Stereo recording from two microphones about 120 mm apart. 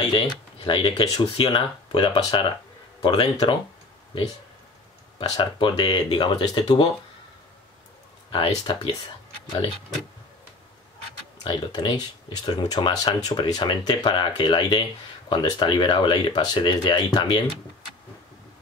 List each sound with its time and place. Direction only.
0.0 s speech: 40° left (ahead or behind)
5.3 s speech: 35° left (ahead or behind)
8.3 s speech: 45° left (ahead or behind)
11.4 s speech: 35° left (ahead or behind)